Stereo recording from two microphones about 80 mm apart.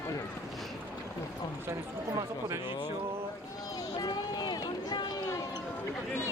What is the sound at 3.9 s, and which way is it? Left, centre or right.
Run, left.